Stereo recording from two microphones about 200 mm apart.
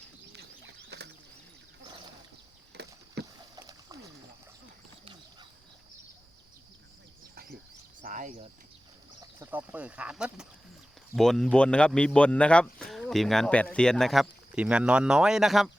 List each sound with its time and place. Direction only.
0.3 s bird: 60° right (ahead or behind)
2.7 s a sound: 55° right (ahead or behind)
3.2 s boat: 55° right (ahead or behind)
3.5 s splash: 20° right (ahead or behind)
8.0 s a sound: 40° right (ahead or behind)
9.4 s speech: 10° right (ahead or behind)